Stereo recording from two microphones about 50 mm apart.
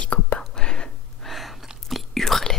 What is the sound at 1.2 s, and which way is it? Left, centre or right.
Whispering, centre.